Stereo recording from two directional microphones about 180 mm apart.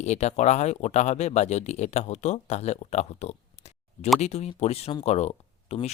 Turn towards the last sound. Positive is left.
turn(degrees=35)  # may be behind; listen again after turning